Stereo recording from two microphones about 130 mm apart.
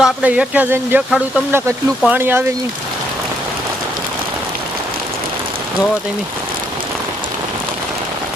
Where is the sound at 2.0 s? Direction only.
15° right (ahead or behind).